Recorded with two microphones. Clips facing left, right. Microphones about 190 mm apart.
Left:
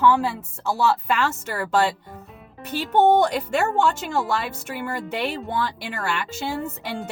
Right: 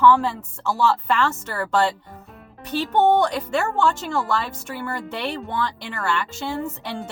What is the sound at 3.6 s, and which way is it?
Speech, 20° left (ahead or behind).